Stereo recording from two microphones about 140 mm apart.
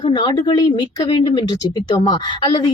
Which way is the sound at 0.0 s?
30° left (ahead or behind).